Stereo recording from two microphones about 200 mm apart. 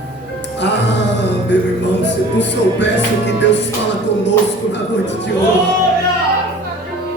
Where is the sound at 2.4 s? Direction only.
60° left (ahead or behind).